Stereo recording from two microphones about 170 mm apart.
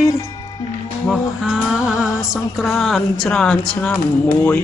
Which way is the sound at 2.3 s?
Centre (ahead or behind).